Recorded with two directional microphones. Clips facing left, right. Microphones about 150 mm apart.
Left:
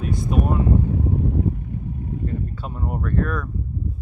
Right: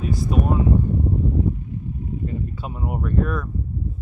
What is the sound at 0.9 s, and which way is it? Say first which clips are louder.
Boat: even; 90° left.